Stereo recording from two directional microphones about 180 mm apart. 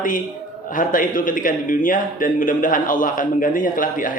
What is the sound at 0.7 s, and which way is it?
A man's voice, 50° left (ahead or behind).